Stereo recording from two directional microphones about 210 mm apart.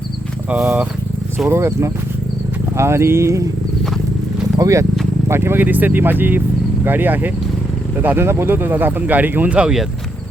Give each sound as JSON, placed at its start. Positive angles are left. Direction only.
{"t": 0.5, "sound": "speech", "side_deg": -5}
{"t": 4.5, "sound": "speech", "side_deg": -15}